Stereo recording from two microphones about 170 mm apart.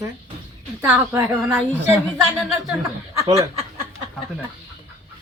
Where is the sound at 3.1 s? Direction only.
20° right (ahead or behind).